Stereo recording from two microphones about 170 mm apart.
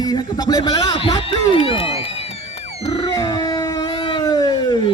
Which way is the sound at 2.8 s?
35° left (ahead or behind).